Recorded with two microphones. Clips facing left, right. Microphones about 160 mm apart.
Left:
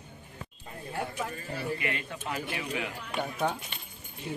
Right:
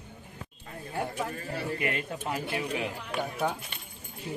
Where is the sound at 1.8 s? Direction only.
45° right (ahead or behind).